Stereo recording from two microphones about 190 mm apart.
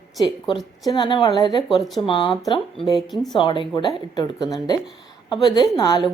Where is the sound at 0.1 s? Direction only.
Centre (ahead or behind).